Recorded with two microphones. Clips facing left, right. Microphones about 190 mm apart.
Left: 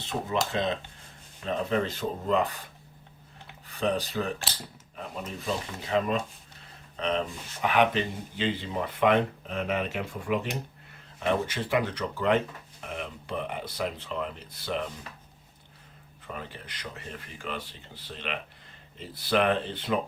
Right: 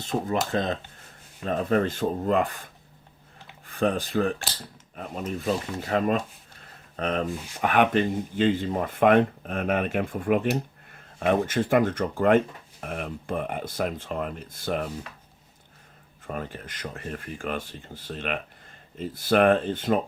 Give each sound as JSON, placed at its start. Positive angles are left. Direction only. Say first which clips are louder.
{"t": 0.5, "sound": "speech", "louder": "right 2 dB", "side_deg": -45}
{"t": 3.7, "sound": "speech", "louder": "right 3 dB", "side_deg": -50}
{"t": 16.2, "sound": "speech", "louder": "right 6 dB", "side_deg": -45}